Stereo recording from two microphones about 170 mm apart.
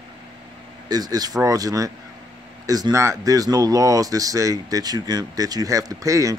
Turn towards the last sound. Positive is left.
turn(degrees=-20)  # may be behind; listen again after turning